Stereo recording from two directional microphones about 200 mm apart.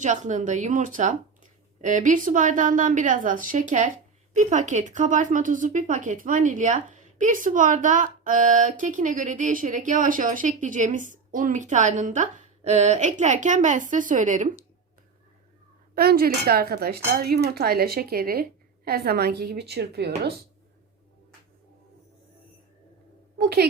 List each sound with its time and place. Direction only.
0.0 s a woman's voice: 40° right (ahead or behind)
16.0 s speech: 50° right (ahead or behind)
23.4 s a woman's voice: 55° right (ahead or behind)